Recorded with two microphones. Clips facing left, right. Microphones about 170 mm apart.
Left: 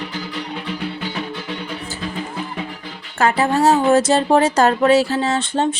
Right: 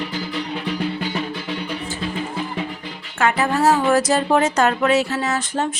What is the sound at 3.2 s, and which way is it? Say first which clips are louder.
Speech: left 2 dB; 30° left (ahead or behind).